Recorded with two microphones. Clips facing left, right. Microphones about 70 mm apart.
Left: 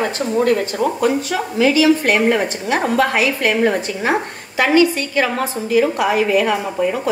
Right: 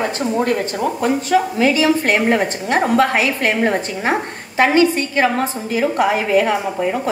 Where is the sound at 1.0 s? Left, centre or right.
Right.